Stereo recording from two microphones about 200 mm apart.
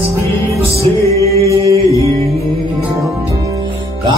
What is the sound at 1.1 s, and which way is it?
Music, 15° left (ahead or behind).